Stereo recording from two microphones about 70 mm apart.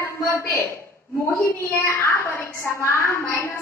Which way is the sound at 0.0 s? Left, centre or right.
Left.